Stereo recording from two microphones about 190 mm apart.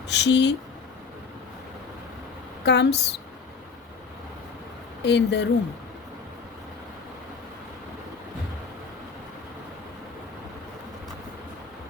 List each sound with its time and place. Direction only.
0.1 s speech: 65° left (ahead or behind)
2.6 s speech: 65° left (ahead or behind)
5.0 s speech: 65° left (ahead or behind)